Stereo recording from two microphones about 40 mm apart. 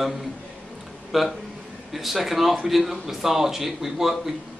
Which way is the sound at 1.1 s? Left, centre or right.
Centre.